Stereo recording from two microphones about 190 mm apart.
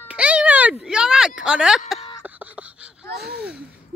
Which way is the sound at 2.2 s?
10° right (ahead or behind).